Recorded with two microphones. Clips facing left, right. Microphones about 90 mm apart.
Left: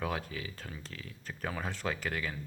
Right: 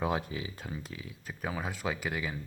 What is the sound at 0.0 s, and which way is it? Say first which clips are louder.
Speech: right 4 dB; 20° right (ahead or behind).